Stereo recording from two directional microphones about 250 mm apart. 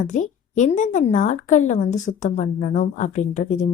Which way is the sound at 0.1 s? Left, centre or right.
Left.